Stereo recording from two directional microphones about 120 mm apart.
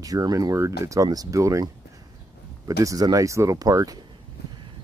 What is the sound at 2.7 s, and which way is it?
Speech, 30° right (ahead or behind).